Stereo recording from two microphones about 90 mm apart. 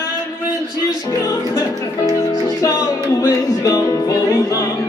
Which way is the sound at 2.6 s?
40° left (ahead or behind).